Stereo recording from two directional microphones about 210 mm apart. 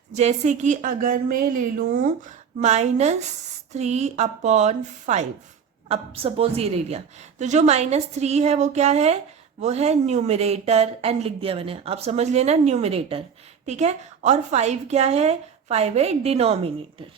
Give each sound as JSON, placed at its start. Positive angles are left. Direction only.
{"t": 0.1, "sound": "a woman's voice", "side_deg": -35}